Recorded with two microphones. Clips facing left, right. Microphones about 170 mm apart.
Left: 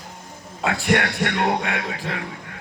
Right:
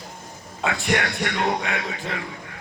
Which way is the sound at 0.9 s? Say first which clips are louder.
Left 2 dB; 60° left (ahead or behind).